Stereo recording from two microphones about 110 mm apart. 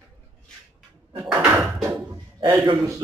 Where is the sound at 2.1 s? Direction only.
35° right (ahead or behind).